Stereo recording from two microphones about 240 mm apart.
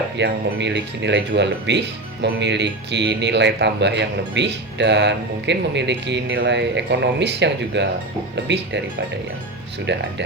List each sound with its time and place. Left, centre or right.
0.2 s speech: right
9.8 s speech: right